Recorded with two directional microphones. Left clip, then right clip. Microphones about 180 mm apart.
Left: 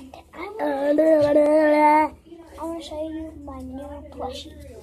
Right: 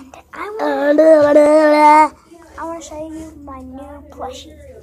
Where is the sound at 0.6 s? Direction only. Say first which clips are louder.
Right 7 dB; centre (ahead or behind).